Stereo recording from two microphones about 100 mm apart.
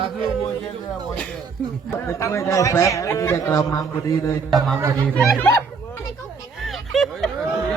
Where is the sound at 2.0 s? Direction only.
30° left (ahead or behind).